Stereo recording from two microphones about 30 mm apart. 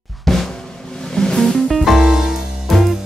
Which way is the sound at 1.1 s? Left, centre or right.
Left.